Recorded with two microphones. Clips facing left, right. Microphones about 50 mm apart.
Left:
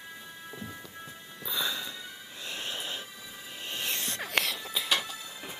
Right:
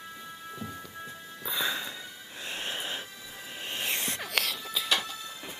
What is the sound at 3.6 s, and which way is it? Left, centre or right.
Music, right.